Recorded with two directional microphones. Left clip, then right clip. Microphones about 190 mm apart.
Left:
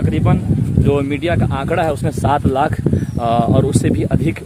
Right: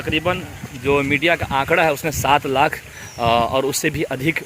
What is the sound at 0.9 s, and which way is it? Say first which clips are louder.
Speech: right 2 dB; 65° left (ahead or behind).